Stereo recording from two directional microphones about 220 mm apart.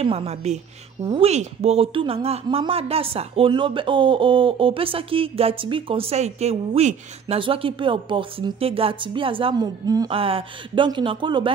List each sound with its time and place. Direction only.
0.0 s speech: 25° right (ahead or behind)